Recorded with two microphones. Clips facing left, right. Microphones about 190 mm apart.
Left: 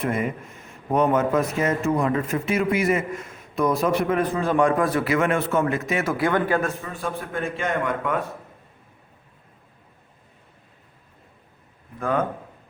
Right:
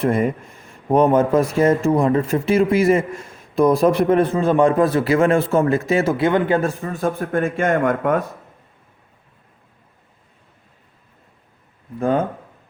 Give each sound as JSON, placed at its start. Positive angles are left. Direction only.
{"t": 0.0, "sound": "speech", "side_deg": -35}
{"t": 6.8, "sound": "speech", "side_deg": -45}
{"t": 11.9, "sound": "speech", "side_deg": -30}